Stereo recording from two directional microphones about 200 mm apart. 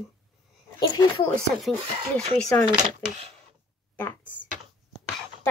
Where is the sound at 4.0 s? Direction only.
10° left (ahead or behind).